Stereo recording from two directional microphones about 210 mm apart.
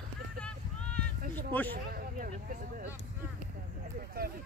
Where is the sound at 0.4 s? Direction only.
5° left (ahead or behind).